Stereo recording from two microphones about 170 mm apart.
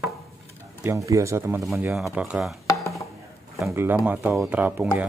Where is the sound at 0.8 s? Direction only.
20° right (ahead or behind).